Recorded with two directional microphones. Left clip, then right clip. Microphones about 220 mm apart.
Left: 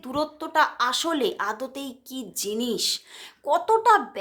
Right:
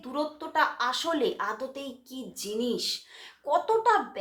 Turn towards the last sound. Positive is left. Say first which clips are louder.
# left 5 dB
turn(degrees=45)  # may be behind; listen again after turning